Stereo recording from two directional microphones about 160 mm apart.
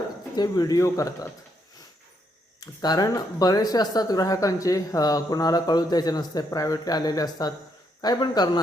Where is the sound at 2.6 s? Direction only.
25° left (ahead or behind).